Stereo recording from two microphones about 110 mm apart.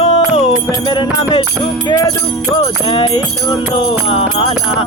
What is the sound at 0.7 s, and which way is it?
Music, 45° left (ahead or behind).